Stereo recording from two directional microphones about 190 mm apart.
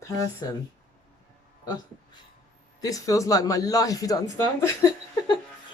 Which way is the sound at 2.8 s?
15° left (ahead or behind).